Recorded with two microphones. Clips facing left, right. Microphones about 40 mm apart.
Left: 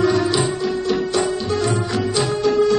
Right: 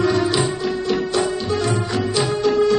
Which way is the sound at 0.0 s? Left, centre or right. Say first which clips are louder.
Left 1 dB; centre.